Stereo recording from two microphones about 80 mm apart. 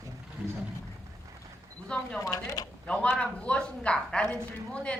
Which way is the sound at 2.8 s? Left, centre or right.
Centre.